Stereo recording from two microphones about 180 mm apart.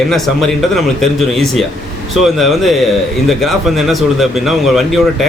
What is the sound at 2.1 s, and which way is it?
Speech, centre (ahead or behind).